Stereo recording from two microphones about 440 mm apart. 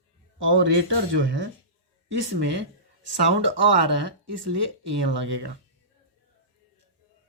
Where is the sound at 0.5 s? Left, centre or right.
Right.